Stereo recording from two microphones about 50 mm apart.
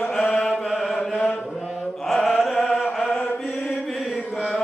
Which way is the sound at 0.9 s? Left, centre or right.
Centre.